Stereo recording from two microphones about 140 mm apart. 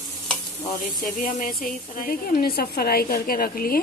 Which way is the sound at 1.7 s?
90° left.